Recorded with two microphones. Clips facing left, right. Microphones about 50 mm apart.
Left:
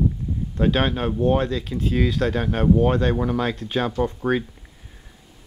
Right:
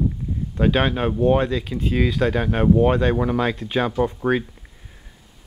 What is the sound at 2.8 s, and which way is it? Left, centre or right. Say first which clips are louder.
Speech: right 2 dB; right.